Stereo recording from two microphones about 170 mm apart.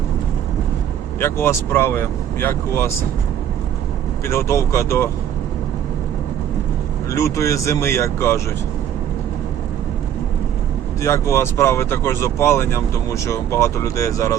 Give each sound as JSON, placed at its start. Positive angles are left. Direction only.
{"t": 1.2, "sound": "speech", "side_deg": 15}
{"t": 4.3, "sound": "speech", "side_deg": 15}
{"t": 7.1, "sound": "speech", "side_deg": 15}
{"t": 11.0, "sound": "speech", "side_deg": 15}